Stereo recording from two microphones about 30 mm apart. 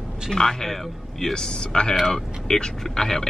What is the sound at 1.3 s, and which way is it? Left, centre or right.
Speech, left.